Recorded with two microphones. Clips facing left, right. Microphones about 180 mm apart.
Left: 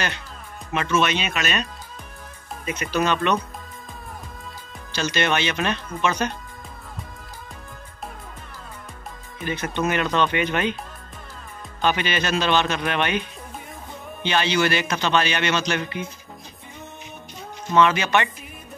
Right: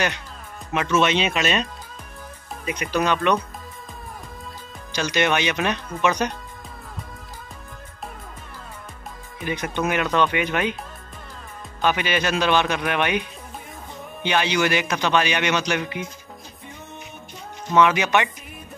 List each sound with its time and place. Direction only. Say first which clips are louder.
0.9 s speech: right 3 dB; 25° right (ahead or behind)
2.6 s a man's voice: even; 15° right (ahead or behind)
4.9 s a man's voice: right 1 dB; 15° right (ahead or behind)
9.4 s a man's voice: even; 15° right (ahead or behind)
11.8 s a man's voice: right 1 dB; 10° right (ahead or behind)
14.2 s a man's voice: even; 15° right (ahead or behind)
17.7 s a man's voice: right 1 dB; 15° right (ahead or behind)